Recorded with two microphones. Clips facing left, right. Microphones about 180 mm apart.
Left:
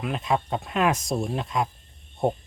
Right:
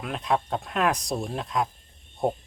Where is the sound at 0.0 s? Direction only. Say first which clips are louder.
Left 1 dB; centre (ahead or behind).